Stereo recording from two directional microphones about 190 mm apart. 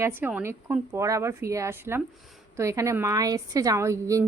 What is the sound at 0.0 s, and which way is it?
A woman's voice, 10° right (ahead or behind).